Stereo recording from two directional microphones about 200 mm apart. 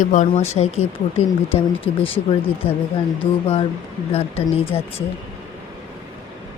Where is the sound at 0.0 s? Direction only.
40° left (ahead or behind).